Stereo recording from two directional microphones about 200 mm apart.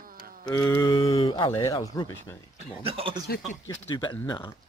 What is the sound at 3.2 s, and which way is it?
Speech, 50° left (ahead or behind).